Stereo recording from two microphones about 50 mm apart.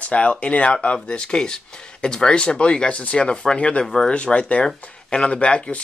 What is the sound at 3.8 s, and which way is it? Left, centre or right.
Speech, centre.